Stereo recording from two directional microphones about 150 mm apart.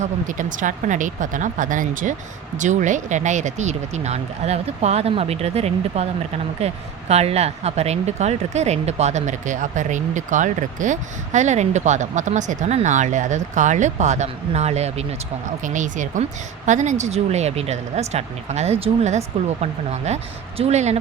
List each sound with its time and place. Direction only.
0.0 s speech: 60° right (ahead or behind)